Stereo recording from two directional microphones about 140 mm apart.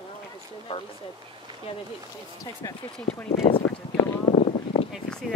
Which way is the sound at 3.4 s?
40° left (ahead or behind).